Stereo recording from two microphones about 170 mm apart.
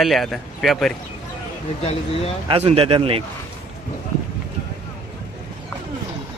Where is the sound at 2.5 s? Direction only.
35° right (ahead or behind).